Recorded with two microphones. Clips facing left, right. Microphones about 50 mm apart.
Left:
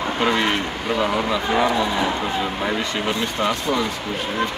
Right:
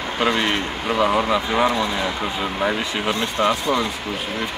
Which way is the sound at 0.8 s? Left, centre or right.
Centre.